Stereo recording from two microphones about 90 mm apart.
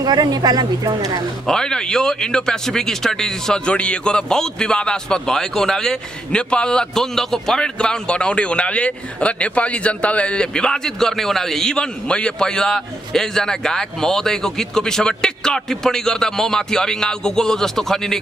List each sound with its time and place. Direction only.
0.0 s speech: 50° right (ahead or behind)
1.5 s a man's voice: 10° left (ahead or behind)